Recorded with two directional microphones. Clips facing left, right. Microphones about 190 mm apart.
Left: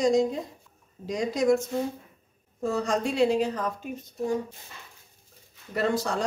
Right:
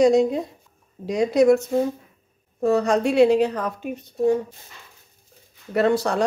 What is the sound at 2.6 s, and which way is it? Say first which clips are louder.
Speech: right 7 dB; 65° right (ahead or behind).